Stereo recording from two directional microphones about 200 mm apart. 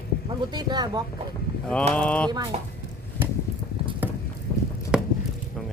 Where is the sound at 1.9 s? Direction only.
5° left (ahead or behind).